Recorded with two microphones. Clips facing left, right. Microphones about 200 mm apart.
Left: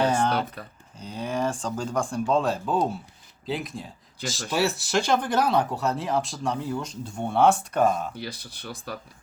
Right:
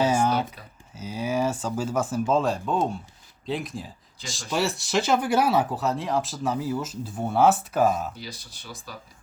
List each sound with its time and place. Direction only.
0.0 s a sound: 5° right (ahead or behind)
0.9 s speech: 5° right (ahead or behind)
8.1 s speech: 60° left (ahead or behind)